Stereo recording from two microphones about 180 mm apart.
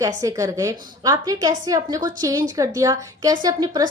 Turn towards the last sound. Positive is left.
turn(degrees=-20)  # may be behind; listen again after turning